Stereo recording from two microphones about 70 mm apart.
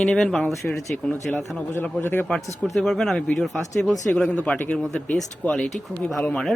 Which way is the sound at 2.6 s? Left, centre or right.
Centre.